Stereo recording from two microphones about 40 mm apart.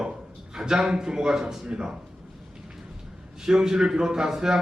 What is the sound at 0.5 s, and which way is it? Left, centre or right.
A man's voice, centre.